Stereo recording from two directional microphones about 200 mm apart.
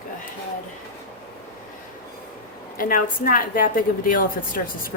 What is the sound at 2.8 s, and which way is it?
A woman's voice, 45° left (ahead or behind).